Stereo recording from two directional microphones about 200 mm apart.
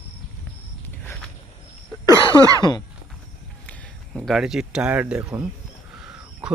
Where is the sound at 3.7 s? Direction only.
Centre (ahead or behind).